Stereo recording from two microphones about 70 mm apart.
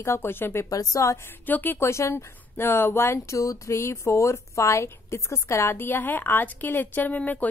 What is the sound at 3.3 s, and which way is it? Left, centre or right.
A woman's voice, left.